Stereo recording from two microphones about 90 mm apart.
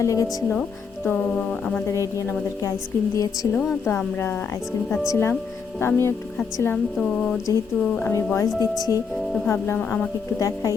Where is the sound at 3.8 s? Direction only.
25° left (ahead or behind).